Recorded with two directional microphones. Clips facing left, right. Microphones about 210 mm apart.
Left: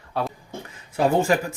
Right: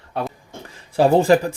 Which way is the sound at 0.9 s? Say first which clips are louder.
Right 6 dB; 35° right (ahead or behind).